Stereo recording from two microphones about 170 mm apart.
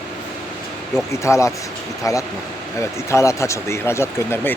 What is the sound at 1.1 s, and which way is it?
A man's voice, 15° left (ahead or behind).